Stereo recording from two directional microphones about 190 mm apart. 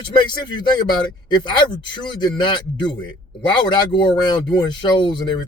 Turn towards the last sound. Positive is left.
turn(degrees=25)  # may be behind; listen again after turning